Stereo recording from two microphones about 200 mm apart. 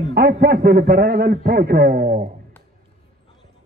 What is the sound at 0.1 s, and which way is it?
A man's voice, 50° right (ahead or behind).